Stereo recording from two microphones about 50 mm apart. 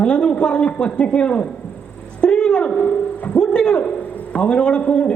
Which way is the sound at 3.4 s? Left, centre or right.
Centre.